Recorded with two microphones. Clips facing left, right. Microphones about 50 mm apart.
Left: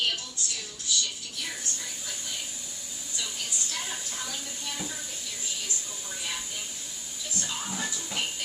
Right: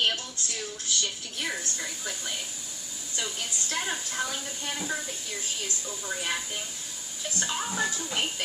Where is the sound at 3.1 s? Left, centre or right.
Right.